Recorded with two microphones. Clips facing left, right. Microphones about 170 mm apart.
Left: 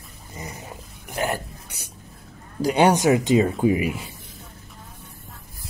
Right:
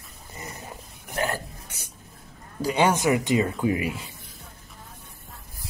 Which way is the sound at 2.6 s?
15° left (ahead or behind).